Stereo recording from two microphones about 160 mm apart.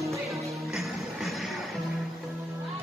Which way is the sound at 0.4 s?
20° right (ahead or behind).